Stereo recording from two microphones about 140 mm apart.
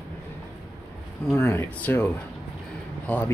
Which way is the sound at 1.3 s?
15° left (ahead or behind).